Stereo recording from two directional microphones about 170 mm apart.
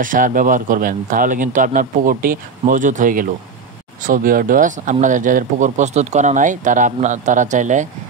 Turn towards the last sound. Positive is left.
turn(degrees=-45)  # may be behind; listen again after turning